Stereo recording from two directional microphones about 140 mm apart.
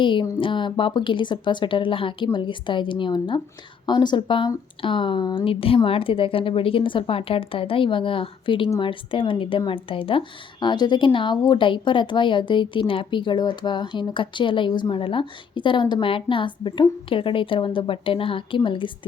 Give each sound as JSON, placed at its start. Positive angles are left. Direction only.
{"t": 0.0, "sound": "speech", "side_deg": 35}